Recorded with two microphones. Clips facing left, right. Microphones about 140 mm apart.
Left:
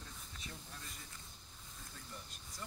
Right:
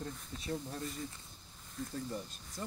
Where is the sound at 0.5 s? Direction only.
40° right (ahead or behind).